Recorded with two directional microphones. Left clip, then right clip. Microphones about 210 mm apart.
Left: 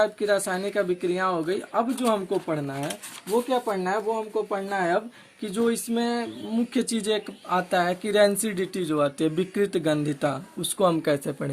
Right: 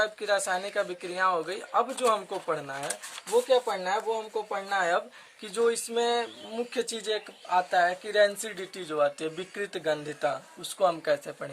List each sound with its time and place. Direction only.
0.0 s speech: 10° left (ahead or behind)
6.7 s speech: 20° left (ahead or behind)